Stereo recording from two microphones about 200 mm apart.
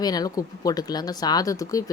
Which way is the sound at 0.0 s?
20° left (ahead or behind).